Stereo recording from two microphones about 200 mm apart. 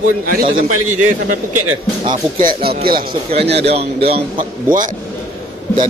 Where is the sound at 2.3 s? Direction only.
45° right (ahead or behind).